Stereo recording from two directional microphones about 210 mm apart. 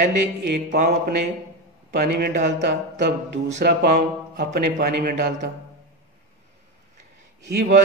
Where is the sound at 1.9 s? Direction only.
50° right (ahead or behind).